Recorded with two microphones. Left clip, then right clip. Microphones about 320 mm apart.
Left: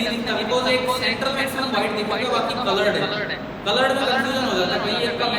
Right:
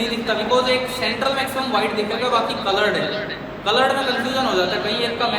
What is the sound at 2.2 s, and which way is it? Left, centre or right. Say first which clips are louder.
A man's voice: right 3 dB; centre.